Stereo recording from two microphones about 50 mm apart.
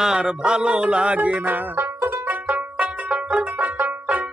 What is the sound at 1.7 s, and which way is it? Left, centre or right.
Music, right.